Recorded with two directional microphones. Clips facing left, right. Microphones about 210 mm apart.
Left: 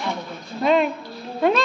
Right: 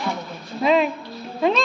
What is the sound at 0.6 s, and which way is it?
Speech, centre (ahead or behind).